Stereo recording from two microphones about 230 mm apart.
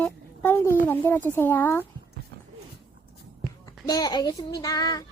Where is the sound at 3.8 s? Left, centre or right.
Centre.